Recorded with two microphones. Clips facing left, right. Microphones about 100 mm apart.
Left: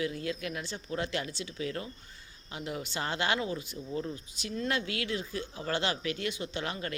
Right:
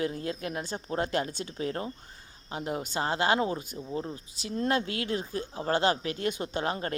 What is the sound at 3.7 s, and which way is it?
Speech, 30° right (ahead or behind).